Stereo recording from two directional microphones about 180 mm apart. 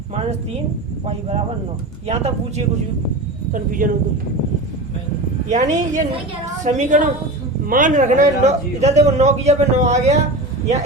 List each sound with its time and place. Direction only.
1.0 s a man's voice: 30° right (ahead or behind)
3.5 s speech: 50° right (ahead or behind)
5.5 s a man's voice: 40° right (ahead or behind)